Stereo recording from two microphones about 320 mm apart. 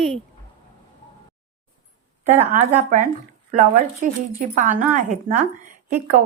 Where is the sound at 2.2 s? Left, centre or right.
Right.